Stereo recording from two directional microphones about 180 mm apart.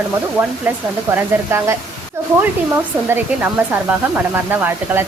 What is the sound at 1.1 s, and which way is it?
Speech, 15° right (ahead or behind).